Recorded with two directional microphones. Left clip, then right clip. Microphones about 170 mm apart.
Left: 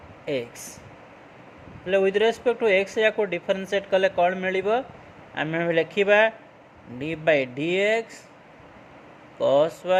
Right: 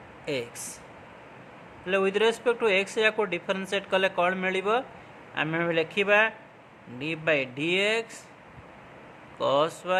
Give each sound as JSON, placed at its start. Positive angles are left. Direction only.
{"t": 0.3, "sound": "speech", "side_deg": 10}
{"t": 1.8, "sound": "speech", "side_deg": 10}
{"t": 9.4, "sound": "speech", "side_deg": 15}